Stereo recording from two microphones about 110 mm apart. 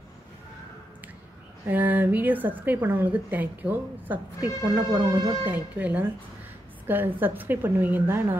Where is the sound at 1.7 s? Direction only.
15° right (ahead or behind).